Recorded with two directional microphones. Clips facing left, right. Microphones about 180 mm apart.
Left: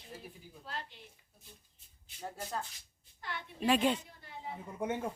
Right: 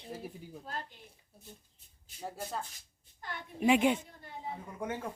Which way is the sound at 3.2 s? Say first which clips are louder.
Even; 45° right (ahead or behind).